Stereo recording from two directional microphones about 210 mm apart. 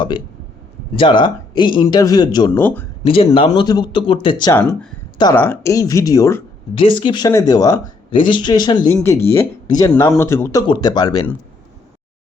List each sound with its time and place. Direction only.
0.9 s speech: 20° left (ahead or behind)
3.0 s speech: 25° left (ahead or behind)